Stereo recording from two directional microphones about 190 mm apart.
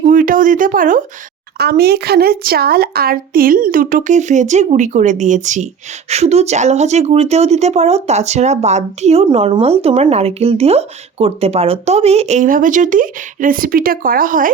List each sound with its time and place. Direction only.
0.0 s speech: 45° right (ahead or behind)
1.5 s speech: 55° right (ahead or behind)